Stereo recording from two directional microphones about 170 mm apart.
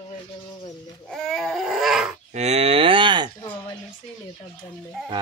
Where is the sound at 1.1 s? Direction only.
Centre (ahead or behind).